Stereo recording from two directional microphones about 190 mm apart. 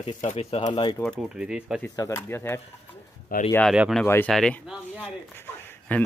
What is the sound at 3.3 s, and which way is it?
Speech, 50° left (ahead or behind).